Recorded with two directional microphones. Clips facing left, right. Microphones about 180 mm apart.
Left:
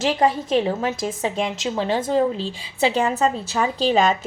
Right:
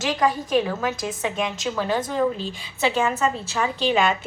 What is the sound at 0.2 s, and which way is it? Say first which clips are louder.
A woman's voice: right 1 dB; 30° left (ahead or behind).